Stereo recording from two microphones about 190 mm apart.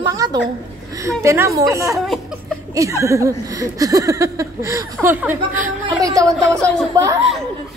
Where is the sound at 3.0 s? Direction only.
15° right (ahead or behind).